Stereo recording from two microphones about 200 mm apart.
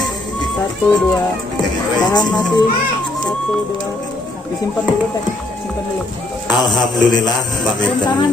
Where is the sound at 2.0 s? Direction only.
20° left (ahead or behind).